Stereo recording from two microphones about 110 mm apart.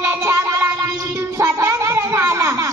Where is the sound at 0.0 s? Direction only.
25° right (ahead or behind).